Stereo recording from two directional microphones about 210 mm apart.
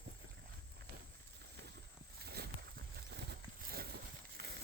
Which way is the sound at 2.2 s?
50° right (ahead or behind).